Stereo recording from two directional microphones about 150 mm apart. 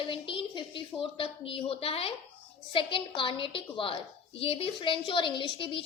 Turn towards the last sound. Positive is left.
turn(degrees=35)  # may be behind; listen again after turning